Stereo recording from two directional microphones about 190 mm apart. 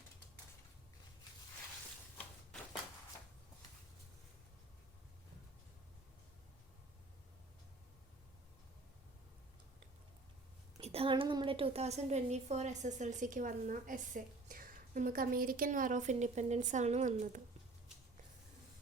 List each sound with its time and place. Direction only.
10.8 s a woman's voice: 35° right (ahead or behind)